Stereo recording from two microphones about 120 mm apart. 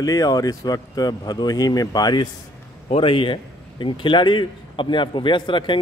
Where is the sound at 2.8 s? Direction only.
50° left (ahead or behind).